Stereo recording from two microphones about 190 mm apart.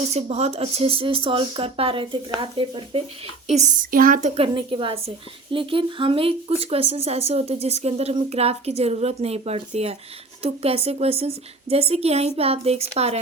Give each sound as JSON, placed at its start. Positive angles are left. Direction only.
{"t": 0.1, "sound": "a woman's voice", "side_deg": -35}
{"t": 4.4, "sound": "a woman's voice", "side_deg": -25}